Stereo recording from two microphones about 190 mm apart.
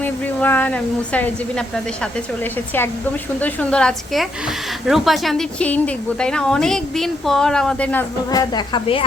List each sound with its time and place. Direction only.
0.0 s a woman's voice: 10° left (ahead or behind)
8.3 s a woman's voice: 20° left (ahead or behind)